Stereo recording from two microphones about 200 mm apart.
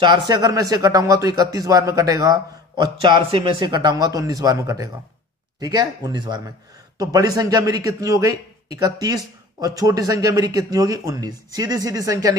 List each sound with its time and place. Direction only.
0.0 s a man's voice: 20° right (ahead or behind)